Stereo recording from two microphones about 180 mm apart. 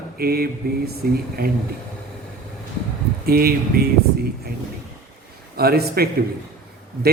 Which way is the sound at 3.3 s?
55° right (ahead or behind).